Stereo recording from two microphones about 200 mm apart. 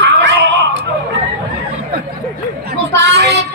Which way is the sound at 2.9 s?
60° right (ahead or behind).